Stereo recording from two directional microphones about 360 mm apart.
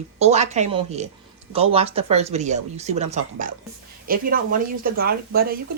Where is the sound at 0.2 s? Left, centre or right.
Centre.